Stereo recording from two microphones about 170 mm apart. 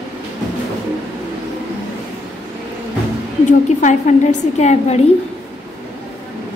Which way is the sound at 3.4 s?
45° left (ahead or behind).